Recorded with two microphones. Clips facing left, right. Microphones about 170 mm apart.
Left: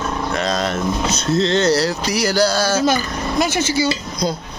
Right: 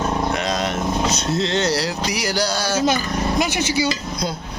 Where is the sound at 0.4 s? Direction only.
15° right (ahead or behind).